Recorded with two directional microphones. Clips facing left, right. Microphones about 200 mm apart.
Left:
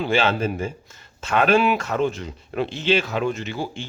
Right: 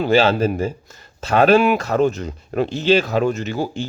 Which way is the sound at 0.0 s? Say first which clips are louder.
Right 5 dB; 40° right (ahead or behind).